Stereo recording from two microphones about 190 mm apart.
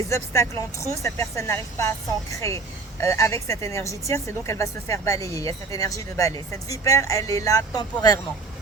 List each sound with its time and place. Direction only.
0.1 s speech: 15° left (ahead or behind)